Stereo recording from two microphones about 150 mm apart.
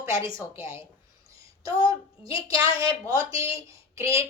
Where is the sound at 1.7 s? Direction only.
35° left (ahead or behind).